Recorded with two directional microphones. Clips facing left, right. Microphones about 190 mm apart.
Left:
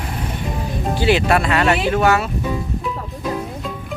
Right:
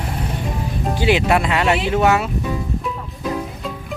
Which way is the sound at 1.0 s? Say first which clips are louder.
Even; 15° right (ahead or behind).